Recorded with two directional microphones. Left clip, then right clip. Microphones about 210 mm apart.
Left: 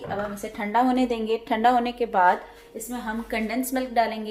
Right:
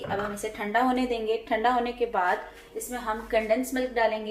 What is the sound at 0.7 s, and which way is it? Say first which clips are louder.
A woman's voice: left 3 dB; 45° left (ahead or behind).